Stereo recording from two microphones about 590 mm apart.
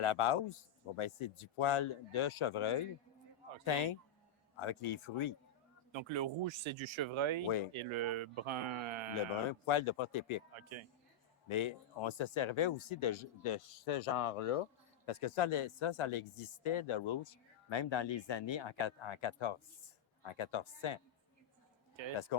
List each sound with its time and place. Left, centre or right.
0.0 s speech: left
5.9 s speech: right
7.4 s speech: left
7.7 s speech: right
9.5 s speech: left
11.4 s speech: left
22.3 s speech: left